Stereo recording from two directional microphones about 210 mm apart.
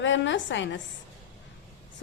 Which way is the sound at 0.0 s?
60° left (ahead or behind).